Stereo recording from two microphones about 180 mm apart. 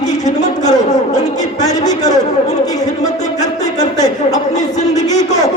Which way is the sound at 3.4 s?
40° left (ahead or behind).